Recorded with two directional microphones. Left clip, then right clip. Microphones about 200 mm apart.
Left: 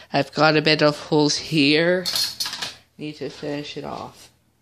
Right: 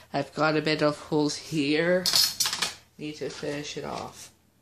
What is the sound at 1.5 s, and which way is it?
Speech, 40° left (ahead or behind).